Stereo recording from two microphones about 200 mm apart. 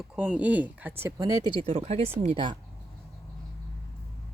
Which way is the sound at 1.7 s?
30° right (ahead or behind).